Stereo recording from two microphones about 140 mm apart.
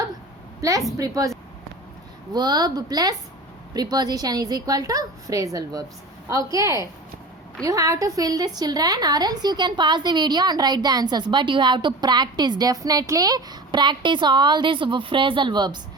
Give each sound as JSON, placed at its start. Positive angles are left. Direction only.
{"t": 0.6, "sound": "a woman's voice", "side_deg": -20}